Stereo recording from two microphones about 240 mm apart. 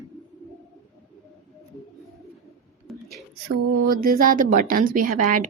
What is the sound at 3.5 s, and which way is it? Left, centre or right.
A woman's voice, right.